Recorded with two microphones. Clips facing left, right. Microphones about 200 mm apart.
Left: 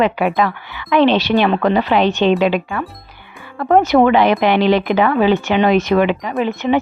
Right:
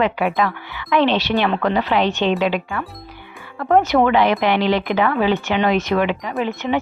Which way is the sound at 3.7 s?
15° left (ahead or behind).